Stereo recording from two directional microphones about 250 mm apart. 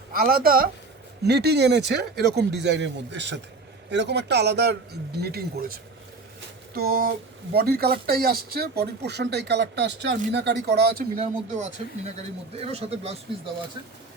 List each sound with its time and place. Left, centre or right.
0.1 s speech: right
11.2 s speech: right